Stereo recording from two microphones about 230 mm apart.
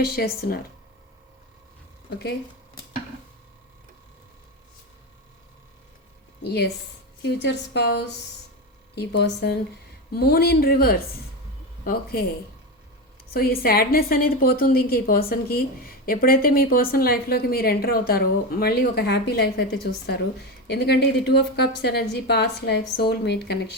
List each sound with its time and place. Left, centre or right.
0.0 s a woman's voice: left
6.4 s a woman's voice: left
13.3 s a woman's voice: left